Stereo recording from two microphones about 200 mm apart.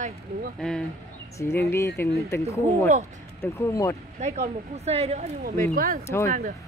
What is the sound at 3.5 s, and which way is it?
Speech, 15° left (ahead or behind).